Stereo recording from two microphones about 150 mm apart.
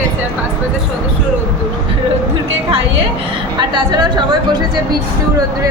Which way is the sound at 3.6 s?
30° right (ahead or behind).